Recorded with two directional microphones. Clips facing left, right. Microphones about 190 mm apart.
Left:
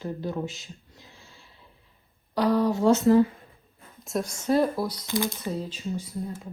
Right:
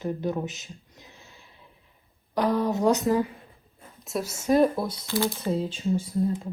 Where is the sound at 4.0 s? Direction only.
Centre (ahead or behind).